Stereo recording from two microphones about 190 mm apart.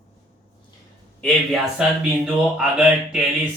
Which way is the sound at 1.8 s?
5° right (ahead or behind).